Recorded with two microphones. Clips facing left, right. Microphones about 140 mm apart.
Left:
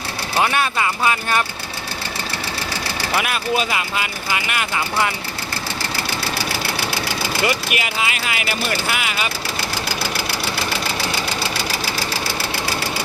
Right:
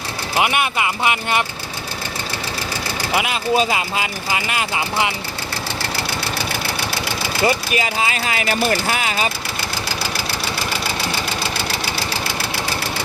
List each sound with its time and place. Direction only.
0.3 s speech: 15° right (ahead or behind)
3.1 s speech: 20° right (ahead or behind)
7.4 s speech: 30° right (ahead or behind)